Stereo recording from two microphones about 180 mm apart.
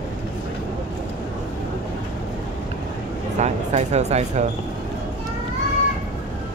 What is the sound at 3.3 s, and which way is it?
Speech, 40° right (ahead or behind).